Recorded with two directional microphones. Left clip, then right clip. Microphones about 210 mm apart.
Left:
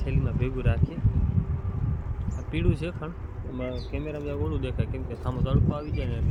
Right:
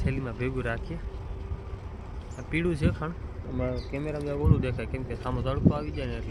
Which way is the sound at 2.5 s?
10° right (ahead or behind).